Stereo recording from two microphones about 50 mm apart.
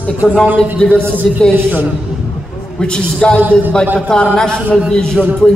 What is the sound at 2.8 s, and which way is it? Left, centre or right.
Speech, centre.